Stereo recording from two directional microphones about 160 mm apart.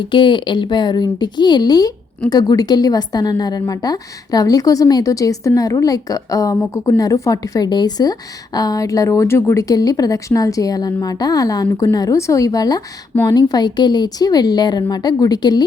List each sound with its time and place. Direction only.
0.0 s a woman's voice: 30° left (ahead or behind)